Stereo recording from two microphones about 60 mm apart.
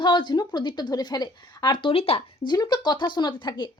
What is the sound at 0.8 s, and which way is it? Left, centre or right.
Speech, left.